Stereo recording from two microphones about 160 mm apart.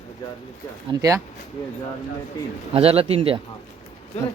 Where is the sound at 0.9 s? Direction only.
25° right (ahead or behind).